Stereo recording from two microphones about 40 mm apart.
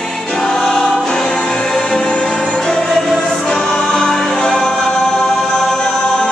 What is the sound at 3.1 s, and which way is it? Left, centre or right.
Choir, centre.